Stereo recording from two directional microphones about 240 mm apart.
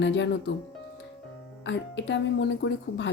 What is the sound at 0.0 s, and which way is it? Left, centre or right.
Speech, left.